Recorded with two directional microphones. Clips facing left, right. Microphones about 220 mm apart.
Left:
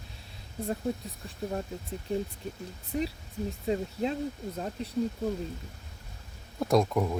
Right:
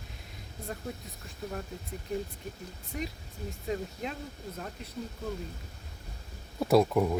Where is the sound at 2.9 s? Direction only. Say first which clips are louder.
Left 6 dB; 30° left (ahead or behind).